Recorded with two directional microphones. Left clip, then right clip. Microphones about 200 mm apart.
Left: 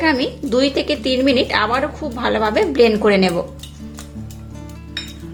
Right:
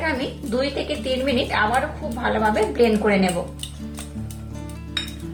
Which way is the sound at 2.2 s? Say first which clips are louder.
Left 3 dB; 50° left (ahead or behind).